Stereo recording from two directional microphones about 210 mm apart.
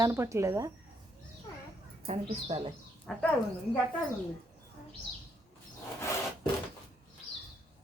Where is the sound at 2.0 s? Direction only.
25° right (ahead or behind).